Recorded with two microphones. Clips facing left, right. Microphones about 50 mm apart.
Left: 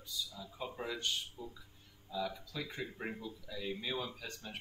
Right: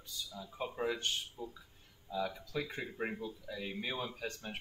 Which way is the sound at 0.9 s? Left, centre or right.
Right.